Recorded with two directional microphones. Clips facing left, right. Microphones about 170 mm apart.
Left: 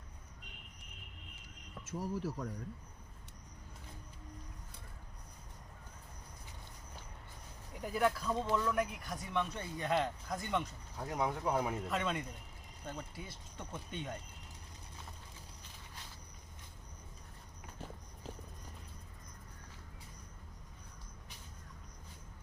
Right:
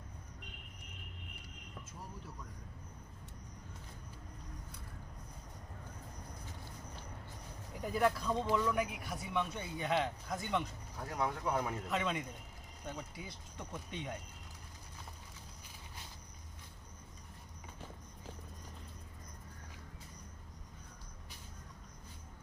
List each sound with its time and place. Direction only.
1.8 s speech: 90° left
7.8 s speech: centre (ahead or behind)
10.9 s speech: 15° left (ahead or behind)
11.9 s speech: centre (ahead or behind)